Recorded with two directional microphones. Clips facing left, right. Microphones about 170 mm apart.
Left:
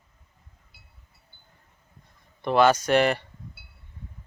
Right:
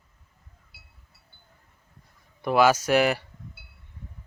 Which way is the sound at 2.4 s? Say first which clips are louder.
Even; 5° right (ahead or behind).